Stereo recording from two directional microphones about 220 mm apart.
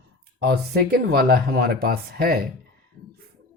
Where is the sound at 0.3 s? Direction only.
45° right (ahead or behind).